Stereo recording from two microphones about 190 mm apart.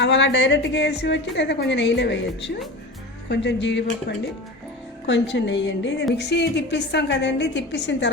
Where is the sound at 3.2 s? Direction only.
65° left (ahead or behind).